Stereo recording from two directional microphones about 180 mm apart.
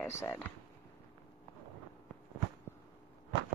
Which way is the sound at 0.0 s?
15° left (ahead or behind).